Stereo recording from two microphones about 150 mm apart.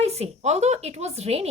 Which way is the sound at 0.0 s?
45° right (ahead or behind).